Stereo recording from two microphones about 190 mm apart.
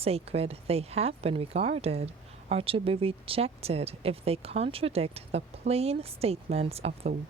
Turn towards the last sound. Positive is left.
turn(degrees=-30)  # may be behind; listen again after turning